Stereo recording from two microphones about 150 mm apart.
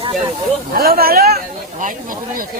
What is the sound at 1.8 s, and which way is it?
Speech, 65° right (ahead or behind).